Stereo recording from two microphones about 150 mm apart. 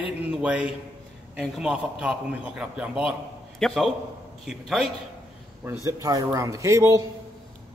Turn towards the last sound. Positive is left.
turn(degrees=-20)  # may be behind; listen again after turning